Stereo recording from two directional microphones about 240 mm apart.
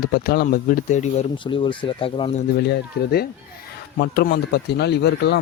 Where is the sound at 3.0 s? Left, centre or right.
Left.